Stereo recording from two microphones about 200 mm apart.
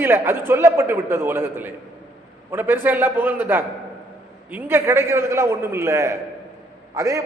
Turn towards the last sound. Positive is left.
turn(degrees=-15)  # may be behind; listen again after turning